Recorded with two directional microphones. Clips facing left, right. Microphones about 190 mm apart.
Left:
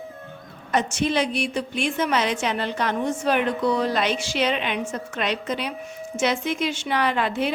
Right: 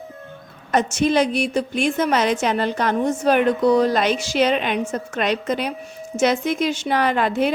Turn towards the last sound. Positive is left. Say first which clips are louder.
# right 4 dB
turn(degrees=-45)  # may be behind; listen again after turning